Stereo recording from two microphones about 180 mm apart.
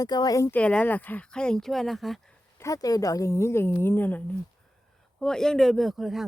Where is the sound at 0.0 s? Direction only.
20° left (ahead or behind).